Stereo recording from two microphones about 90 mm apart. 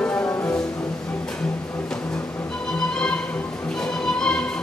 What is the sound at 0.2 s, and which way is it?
Music, 30° left (ahead or behind).